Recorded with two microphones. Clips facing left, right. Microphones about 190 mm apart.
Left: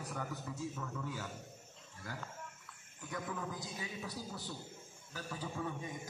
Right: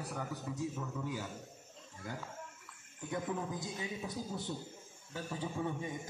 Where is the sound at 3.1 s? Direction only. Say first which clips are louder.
Right 4 dB; 25° right (ahead or behind).